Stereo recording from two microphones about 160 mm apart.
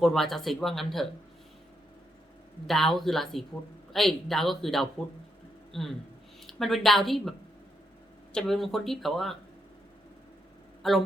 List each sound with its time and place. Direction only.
0.0 s speech: centre (ahead or behind)
2.6 s speech: centre (ahead or behind)
10.8 s speech: centre (ahead or behind)